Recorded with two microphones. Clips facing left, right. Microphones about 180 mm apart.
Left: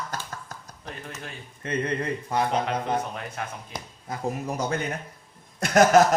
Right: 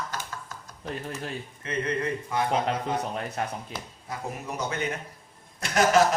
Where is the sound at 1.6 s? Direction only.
35° left (ahead or behind).